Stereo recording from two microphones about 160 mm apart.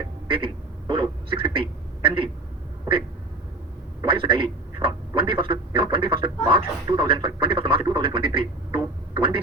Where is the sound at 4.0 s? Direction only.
35° right (ahead or behind).